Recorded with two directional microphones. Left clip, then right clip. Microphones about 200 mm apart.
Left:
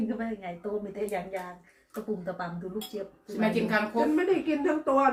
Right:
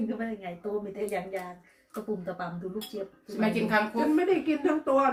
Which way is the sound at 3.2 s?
10° left (ahead or behind).